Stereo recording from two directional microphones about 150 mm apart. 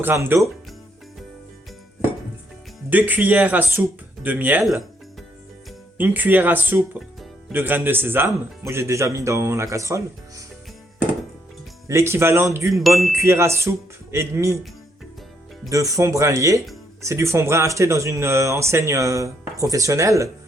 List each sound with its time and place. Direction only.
0.0 s speech: 15° right (ahead or behind)
2.9 s speech: 10° right (ahead or behind)
4.6 s speech: centre (ahead or behind)
6.0 s speech: 10° right (ahead or behind)
11.9 s speech: 15° right (ahead or behind)
15.7 s speech: 20° right (ahead or behind)